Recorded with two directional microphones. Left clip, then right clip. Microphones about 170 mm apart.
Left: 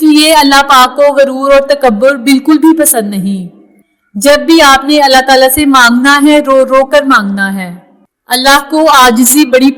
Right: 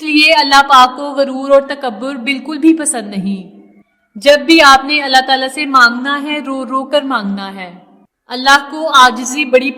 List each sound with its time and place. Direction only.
0.0 s a woman's voice: 25° left (ahead or behind)